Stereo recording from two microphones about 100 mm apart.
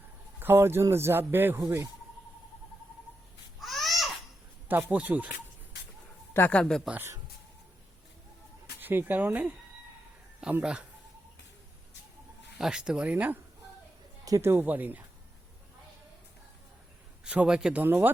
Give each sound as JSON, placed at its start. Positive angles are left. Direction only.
{"t": 0.3, "sound": "speech", "side_deg": -20}
{"t": 3.6, "sound": "babbling", "side_deg": 0}
{"t": 4.7, "sound": "speech", "side_deg": -15}
{"t": 6.3, "sound": "speech", "side_deg": 20}
{"t": 6.6, "sound": "speech", "side_deg": 5}
{"t": 6.9, "sound": "speech", "side_deg": -25}
{"t": 8.8, "sound": "speech", "side_deg": -20}
{"t": 12.5, "sound": "speech", "side_deg": -5}
{"t": 14.3, "sound": "speech", "side_deg": -35}
{"t": 14.5, "sound": "speech", "side_deg": -20}
{"t": 17.2, "sound": "speech", "side_deg": -10}
{"t": 17.8, "sound": "speech", "side_deg": -20}